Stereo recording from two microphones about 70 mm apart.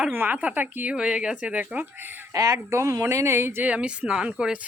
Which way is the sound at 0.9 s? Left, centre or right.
Centre.